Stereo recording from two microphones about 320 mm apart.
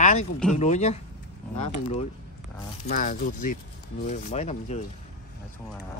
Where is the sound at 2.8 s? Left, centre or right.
Left.